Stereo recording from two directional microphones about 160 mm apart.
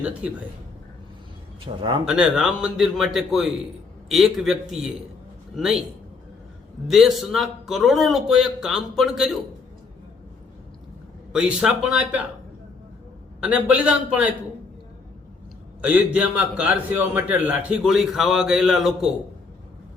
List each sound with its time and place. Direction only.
0.0 s speech: 10° right (ahead or behind)
1.6 s a man's voice: 30° right (ahead or behind)
2.0 s a man's voice: 5° right (ahead or behind)
6.8 s a man's voice: centre (ahead or behind)
11.3 s speech: 5° right (ahead or behind)
13.4 s speech: 10° right (ahead or behind)
15.8 s a man's voice: 10° right (ahead or behind)